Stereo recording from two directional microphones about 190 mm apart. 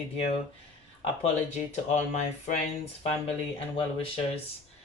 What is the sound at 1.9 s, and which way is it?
Speech, 40° left (ahead or behind).